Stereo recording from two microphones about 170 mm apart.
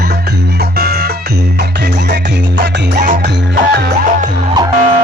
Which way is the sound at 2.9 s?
50° right (ahead or behind).